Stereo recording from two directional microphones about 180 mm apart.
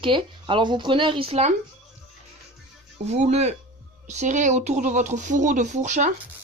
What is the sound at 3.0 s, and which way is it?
Speech, 35° right (ahead or behind).